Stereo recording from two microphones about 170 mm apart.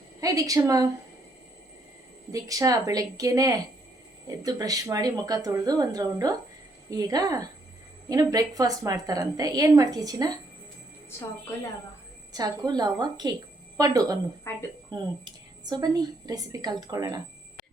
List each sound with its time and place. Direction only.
0.2 s a woman's voice: 20° right (ahead or behind)
2.3 s a woman's voice: 20° right (ahead or behind)
12.3 s a woman's voice: 25° right (ahead or behind)
14.5 s a woman's voice: 15° left (ahead or behind)
14.8 s a woman's voice: 25° right (ahead or behind)